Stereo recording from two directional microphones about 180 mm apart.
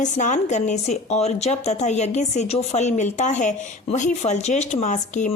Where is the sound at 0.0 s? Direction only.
40° left (ahead or behind).